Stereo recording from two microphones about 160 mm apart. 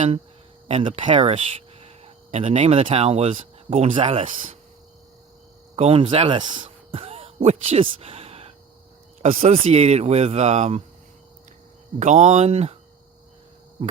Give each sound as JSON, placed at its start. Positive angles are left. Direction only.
{"t": 0.7, "sound": "speech", "side_deg": -35}
{"t": 4.3, "sound": "speech", "side_deg": -55}
{"t": 5.7, "sound": "speech", "side_deg": -40}
{"t": 11.9, "sound": "speech", "side_deg": -50}